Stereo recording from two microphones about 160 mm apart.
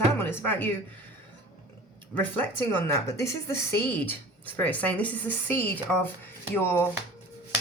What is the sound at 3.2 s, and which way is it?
Speech, 20° left (ahead or behind).